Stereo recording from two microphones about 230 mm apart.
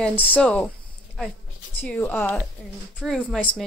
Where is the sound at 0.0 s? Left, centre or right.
Centre.